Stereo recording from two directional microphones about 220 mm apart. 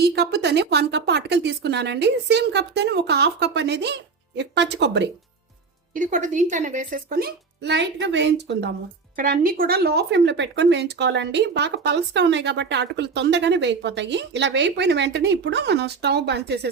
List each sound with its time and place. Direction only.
0.0 s speech: 50° right (ahead or behind)
5.9 s speech: 35° right (ahead or behind); by 8.7 s 50° right (ahead or behind)
9.1 s speech: 40° right (ahead or behind)